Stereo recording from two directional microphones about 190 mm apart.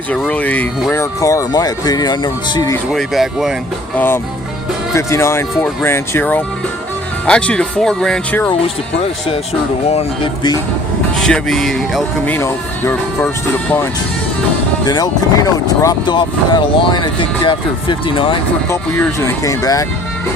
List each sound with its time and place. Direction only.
0.1 s speech: 5° left (ahead or behind)
2.9 s speech: centre (ahead or behind)
3.9 s speech: 10° left (ahead or behind)
9.8 s speech: 35° left (ahead or behind)
11.2 s speech: 5° left (ahead or behind)
14.8 s speech: 20° left (ahead or behind)
18.7 s speech: 10° left (ahead or behind)